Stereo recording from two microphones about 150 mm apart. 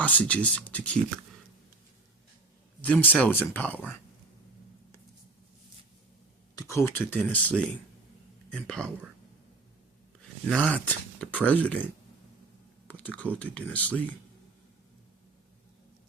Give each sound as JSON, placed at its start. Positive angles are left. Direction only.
{"t": 0.0, "sound": "speech", "side_deg": 10}
{"t": 2.8, "sound": "speech", "side_deg": 10}
{"t": 6.6, "sound": "speech", "side_deg": 20}
{"t": 10.6, "sound": "speech", "side_deg": 10}
{"t": 12.9, "sound": "typing", "side_deg": 10}
{"t": 13.3, "sound": "speech", "side_deg": 5}